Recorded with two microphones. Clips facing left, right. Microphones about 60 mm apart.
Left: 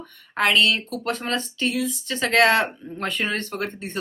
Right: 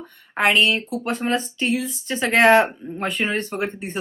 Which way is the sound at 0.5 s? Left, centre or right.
Centre.